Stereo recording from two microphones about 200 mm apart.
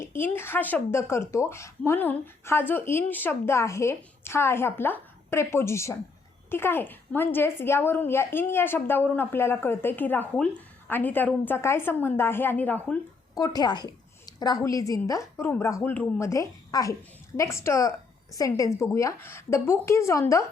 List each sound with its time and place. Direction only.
0.0 s a woman's voice: 10° left (ahead or behind)
13.4 s a woman's voice: 20° left (ahead or behind)